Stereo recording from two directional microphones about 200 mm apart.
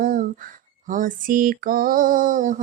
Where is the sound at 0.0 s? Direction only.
45° right (ahead or behind).